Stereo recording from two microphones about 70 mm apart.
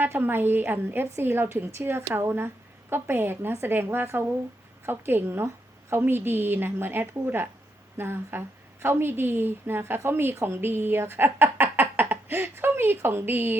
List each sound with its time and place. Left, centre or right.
0.0 s a woman's voice: right